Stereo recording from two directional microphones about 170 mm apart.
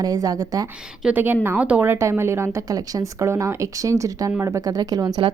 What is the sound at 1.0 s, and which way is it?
A woman's voice, 10° right (ahead or behind).